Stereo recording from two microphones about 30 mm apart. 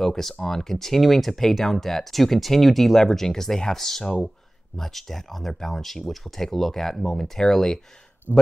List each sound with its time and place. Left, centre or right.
0.0 s speech: centre
3.0 s speech: centre
5.8 s speech: centre
8.3 s speech: right